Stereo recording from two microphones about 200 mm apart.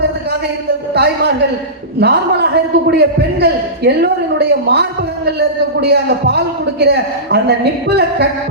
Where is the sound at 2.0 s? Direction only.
55° right (ahead or behind).